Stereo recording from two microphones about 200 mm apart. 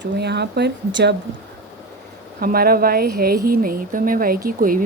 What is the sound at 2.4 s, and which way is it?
Speech, 50° right (ahead or behind).